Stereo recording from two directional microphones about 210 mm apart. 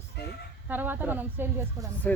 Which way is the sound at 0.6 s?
10° right (ahead or behind).